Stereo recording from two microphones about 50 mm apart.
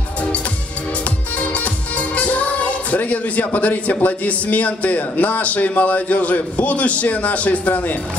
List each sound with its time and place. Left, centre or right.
1.4 s music: left
4.0 s a man's voice: left